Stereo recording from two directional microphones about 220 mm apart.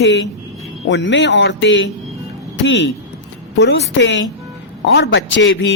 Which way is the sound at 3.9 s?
55° left (ahead or behind).